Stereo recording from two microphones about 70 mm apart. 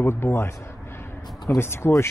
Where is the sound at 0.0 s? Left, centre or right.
Left.